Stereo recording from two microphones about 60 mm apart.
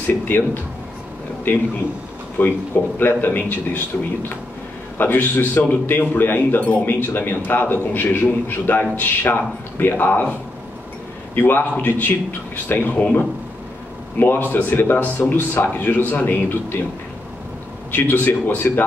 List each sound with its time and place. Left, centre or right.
0.0 s speech: left
11.3 s speech: left
14.5 s speech: left
17.9 s speech: left